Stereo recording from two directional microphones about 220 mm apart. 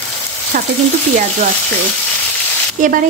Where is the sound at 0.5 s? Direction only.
35° right (ahead or behind).